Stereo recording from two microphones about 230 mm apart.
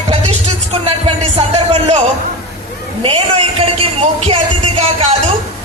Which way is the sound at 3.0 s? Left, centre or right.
Right.